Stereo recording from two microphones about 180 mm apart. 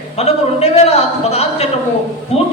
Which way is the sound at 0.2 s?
35° left (ahead or behind).